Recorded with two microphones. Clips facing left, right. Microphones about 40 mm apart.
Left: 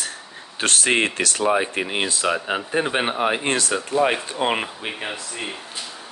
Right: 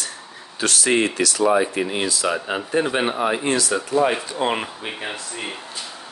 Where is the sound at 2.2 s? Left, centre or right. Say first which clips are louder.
Even; centre.